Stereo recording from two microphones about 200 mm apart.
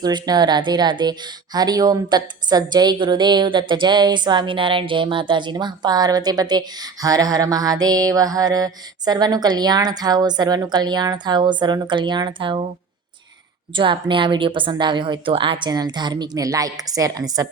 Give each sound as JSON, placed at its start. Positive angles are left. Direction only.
{"t": 0.0, "sound": "speech", "side_deg": -20}
{"t": 13.7, "sound": "a woman's voice", "side_deg": -25}